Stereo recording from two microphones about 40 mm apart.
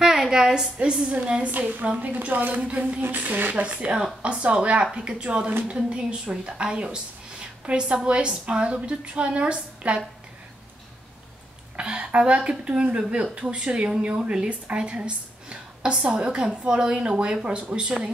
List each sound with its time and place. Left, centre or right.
0.0 s a sound: centre
1.1 s a woman's voice: right
11.7 s a woman's voice: right